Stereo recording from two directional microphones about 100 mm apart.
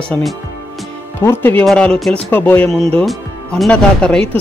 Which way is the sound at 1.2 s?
25° left (ahead or behind).